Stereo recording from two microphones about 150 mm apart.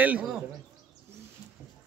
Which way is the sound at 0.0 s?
10° right (ahead or behind).